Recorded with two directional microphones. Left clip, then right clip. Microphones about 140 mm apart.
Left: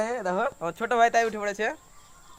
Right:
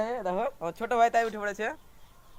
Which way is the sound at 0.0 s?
20° right (ahead or behind).